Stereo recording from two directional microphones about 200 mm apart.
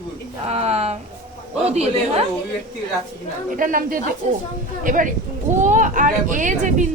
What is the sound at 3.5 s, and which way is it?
Speech, 45° right (ahead or behind).